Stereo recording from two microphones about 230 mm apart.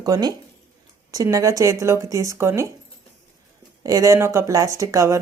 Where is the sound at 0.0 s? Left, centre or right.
Centre.